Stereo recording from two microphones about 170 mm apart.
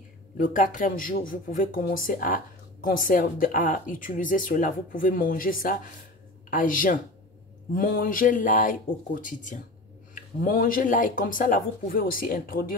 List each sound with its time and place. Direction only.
0.4 s speech: 50° left (ahead or behind)